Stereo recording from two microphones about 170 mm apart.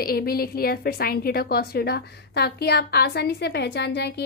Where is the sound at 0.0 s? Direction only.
60° left (ahead or behind).